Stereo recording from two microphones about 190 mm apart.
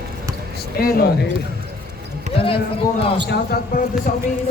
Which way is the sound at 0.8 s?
50° left (ahead or behind).